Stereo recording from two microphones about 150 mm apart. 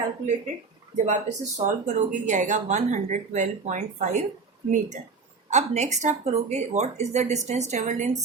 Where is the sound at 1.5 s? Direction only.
55° right (ahead or behind).